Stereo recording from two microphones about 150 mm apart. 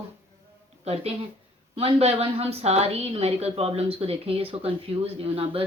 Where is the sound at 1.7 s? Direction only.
40° right (ahead or behind).